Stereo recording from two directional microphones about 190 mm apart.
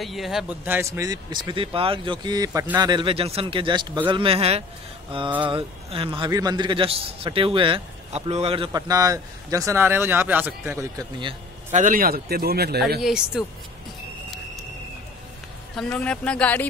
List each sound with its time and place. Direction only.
0.0 s a man's voice: centre (ahead or behind); by 8.6 s 30° right (ahead or behind)
8.7 s speech: 20° right (ahead or behind)
11.7 s speech: 45° right (ahead or behind)
13.0 s speech: 5° right (ahead or behind)
15.7 s speech: 5° left (ahead or behind)